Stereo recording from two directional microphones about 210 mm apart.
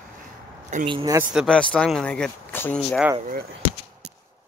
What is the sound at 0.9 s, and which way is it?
Speech, 25° right (ahead or behind).